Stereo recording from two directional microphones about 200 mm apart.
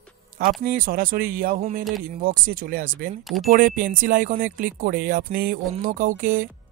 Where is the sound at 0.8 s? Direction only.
45° right (ahead or behind).